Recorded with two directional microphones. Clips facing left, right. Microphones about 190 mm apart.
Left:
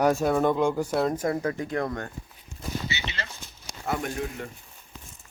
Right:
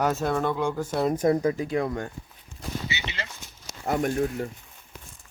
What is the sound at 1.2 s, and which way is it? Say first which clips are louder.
Speech: right 5 dB; 20° right (ahead or behind).